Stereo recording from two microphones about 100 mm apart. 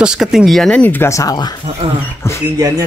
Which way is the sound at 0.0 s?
5° right (ahead or behind).